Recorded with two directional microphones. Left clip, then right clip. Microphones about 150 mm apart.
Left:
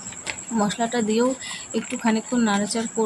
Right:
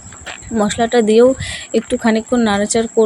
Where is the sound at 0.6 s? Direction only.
35° right (ahead or behind).